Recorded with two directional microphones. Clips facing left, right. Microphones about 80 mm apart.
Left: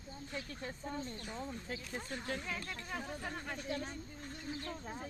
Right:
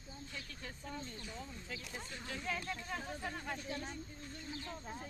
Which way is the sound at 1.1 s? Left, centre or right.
Left.